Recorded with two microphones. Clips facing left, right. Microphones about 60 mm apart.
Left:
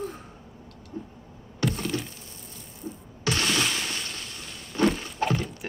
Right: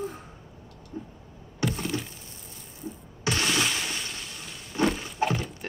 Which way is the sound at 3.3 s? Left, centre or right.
Centre.